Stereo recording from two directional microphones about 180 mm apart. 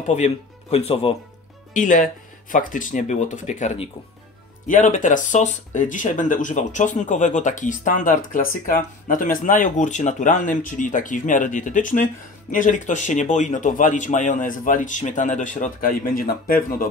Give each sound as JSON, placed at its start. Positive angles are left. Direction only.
{"t": 0.1, "sound": "speech", "side_deg": 35}
{"t": 1.7, "sound": "speech", "side_deg": 45}